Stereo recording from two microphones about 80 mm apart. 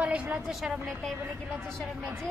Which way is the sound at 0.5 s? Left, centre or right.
Centre.